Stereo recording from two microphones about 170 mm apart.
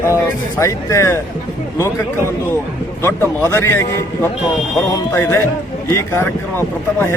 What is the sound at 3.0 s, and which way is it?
Speech, 15° left (ahead or behind).